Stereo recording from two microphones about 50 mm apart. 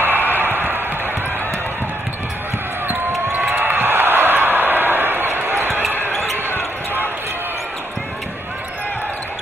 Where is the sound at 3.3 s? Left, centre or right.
Right.